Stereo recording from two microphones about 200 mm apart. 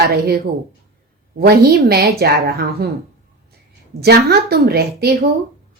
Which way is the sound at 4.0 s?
55° right (ahead or behind).